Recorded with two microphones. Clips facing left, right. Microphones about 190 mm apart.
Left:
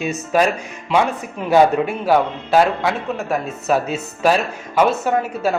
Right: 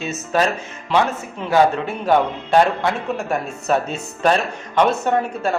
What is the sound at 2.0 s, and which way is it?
Speech, 5° left (ahead or behind).